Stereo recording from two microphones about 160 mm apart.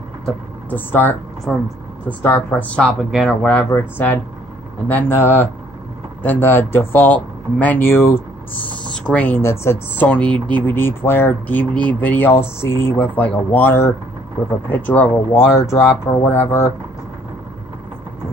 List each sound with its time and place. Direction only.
0.2 s speech: 10° left (ahead or behind)
1.5 s speech: centre (ahead or behind)
2.0 s speech: 15° left (ahead or behind)
3.5 s speech: 10° left (ahead or behind)